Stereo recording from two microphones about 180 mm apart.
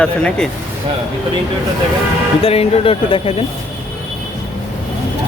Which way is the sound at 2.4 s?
35° left (ahead or behind).